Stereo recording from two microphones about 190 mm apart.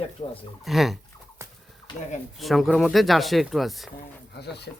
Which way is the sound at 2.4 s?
Centre (ahead or behind).